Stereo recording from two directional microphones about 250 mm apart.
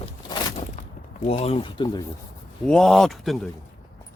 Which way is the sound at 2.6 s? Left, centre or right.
Centre.